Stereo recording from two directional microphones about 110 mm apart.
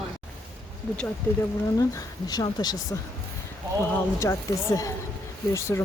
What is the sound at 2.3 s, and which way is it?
Speech, 40° left (ahead or behind).